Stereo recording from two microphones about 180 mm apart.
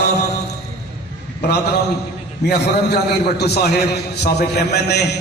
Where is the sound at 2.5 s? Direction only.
65° left (ahead or behind).